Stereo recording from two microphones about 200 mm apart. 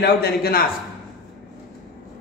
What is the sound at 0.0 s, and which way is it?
Speech, 50° left (ahead or behind).